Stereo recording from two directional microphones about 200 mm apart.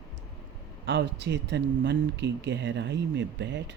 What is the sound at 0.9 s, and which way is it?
Speech, 60° right (ahead or behind).